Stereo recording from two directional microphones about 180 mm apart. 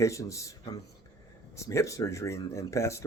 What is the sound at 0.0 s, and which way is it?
Speech, 15° left (ahead or behind).